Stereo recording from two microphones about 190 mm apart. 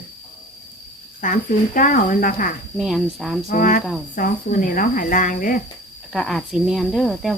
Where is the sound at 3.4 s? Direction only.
45° left (ahead or behind).